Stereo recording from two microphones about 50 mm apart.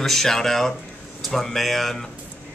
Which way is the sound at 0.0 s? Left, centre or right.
Centre.